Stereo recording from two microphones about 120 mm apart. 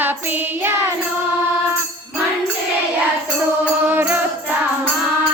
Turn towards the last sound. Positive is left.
turn(degrees=-15)  # may be behind; listen again after turning